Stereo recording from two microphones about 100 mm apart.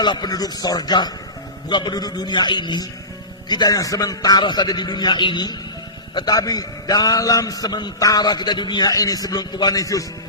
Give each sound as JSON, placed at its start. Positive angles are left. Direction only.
{"t": 0.0, "sound": "a man's voice", "side_deg": 45}